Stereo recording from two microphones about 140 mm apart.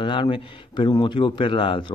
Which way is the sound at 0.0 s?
35° left (ahead or behind).